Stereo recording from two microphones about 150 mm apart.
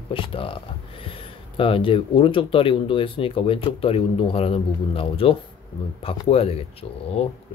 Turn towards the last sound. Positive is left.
turn(degrees=45)  # may be behind; listen again after turning